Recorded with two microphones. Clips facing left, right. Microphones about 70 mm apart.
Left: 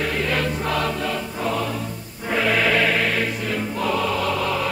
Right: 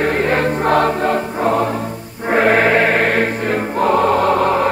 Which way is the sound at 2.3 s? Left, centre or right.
Right.